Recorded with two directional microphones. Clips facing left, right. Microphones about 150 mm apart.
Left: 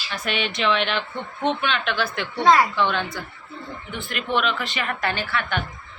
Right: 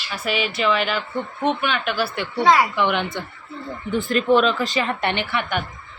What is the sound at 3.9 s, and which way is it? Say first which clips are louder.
Speech: right 8 dB; 35° right (ahead or behind).